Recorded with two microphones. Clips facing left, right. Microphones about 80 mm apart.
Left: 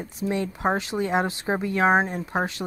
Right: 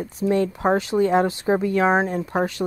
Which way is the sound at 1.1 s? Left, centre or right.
Left.